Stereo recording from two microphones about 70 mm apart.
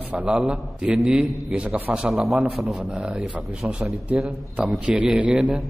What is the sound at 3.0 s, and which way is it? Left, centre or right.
A man's voice, centre.